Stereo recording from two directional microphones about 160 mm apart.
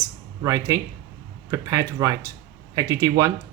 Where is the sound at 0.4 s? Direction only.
20° right (ahead or behind).